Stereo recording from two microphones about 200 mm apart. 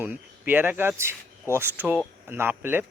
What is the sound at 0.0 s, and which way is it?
A man's voice, 10° right (ahead or behind).